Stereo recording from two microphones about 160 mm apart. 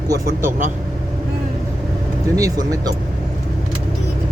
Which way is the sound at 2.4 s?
20° right (ahead or behind).